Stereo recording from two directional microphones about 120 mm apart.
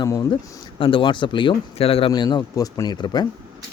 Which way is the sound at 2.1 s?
35° left (ahead or behind).